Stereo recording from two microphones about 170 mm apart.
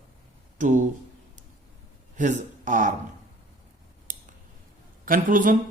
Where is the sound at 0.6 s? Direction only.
50° right (ahead or behind).